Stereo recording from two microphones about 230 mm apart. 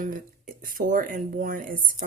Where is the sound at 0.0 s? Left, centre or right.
Right.